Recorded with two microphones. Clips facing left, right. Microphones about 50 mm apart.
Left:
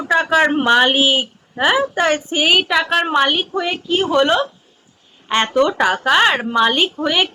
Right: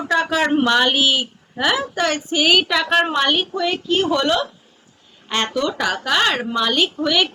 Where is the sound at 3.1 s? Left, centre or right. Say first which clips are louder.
Left 3 dB; centre.